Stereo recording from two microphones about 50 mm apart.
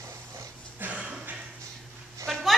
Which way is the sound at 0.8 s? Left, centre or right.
Right.